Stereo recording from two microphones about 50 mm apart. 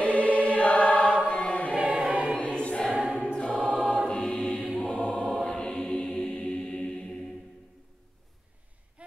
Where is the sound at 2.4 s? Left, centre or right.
Left.